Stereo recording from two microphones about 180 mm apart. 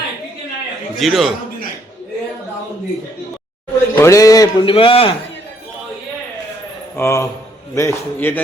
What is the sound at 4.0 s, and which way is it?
A man's voice, 20° left (ahead or behind).